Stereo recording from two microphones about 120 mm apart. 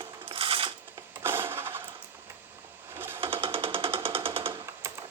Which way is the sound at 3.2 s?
50° right (ahead or behind).